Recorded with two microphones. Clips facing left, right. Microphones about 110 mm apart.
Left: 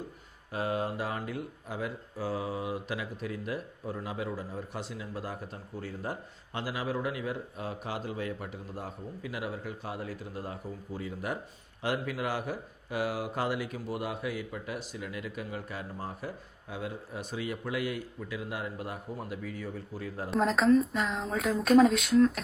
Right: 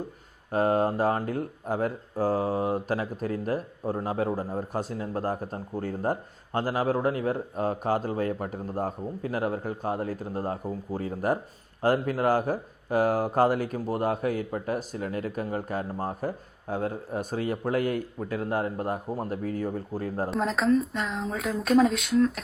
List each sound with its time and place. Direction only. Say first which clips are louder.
0.5 s speech: right 8 dB; 45° right (ahead or behind)
20.3 s speech: left 1 dB; centre (ahead or behind)